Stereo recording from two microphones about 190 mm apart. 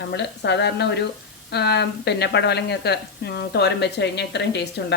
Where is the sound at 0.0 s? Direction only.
65° left (ahead or behind).